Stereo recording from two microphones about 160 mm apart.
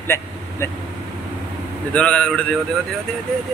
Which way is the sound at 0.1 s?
15° left (ahead or behind).